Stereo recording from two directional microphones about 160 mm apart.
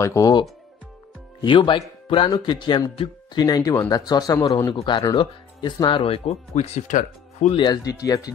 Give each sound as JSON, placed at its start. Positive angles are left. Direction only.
{"t": 0.0, "sound": "speech", "side_deg": 20}
{"t": 6.9, "sound": "speech", "side_deg": 50}
{"t": 7.5, "sound": "speech", "side_deg": 25}